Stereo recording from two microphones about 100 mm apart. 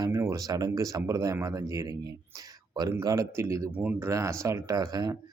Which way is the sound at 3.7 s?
15° right (ahead or behind).